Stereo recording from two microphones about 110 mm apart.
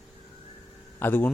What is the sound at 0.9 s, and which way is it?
Speech, 20° left (ahead or behind).